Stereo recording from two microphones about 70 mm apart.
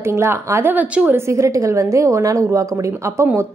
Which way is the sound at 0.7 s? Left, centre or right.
Right.